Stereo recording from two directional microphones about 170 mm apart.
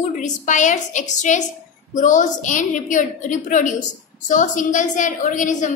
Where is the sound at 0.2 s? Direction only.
45° left (ahead or behind).